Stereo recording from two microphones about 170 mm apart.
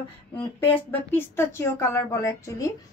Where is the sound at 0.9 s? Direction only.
15° left (ahead or behind).